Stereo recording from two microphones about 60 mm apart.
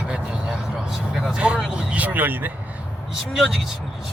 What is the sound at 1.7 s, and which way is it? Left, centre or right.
Speech, right.